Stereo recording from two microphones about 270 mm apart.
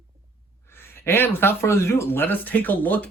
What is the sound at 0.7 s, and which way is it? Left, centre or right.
Speech, centre.